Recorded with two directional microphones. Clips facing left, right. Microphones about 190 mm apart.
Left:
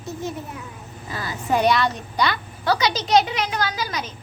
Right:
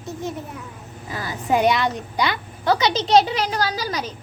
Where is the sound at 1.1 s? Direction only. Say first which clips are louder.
Right 2 dB; 15° right (ahead or behind); by 4.1 s 35° right (ahead or behind).